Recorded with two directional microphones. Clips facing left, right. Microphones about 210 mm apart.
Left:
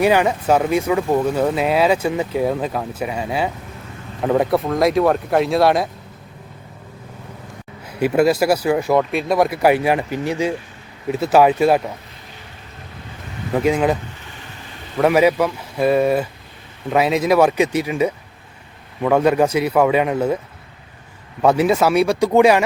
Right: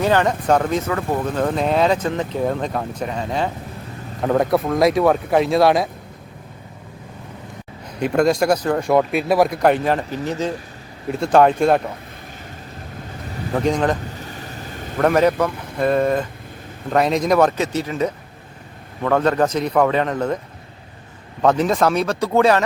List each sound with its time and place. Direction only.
0.0 s speech: 10° left (ahead or behind)
7.9 s speech: 5° left (ahead or behind)
13.5 s speech: 5° left (ahead or behind)
14.2 s vehicle: 40° right (ahead or behind)
14.9 s speech: 5° left (ahead or behind)
21.4 s speech: 10° left (ahead or behind)